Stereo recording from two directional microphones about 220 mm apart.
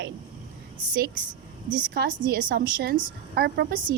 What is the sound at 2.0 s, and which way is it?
A woman's voice, 40° right (ahead or behind).